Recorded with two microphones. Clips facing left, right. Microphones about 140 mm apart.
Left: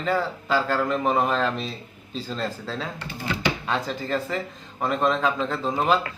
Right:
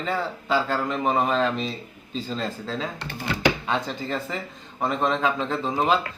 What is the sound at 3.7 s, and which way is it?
Speech, centre (ahead or behind).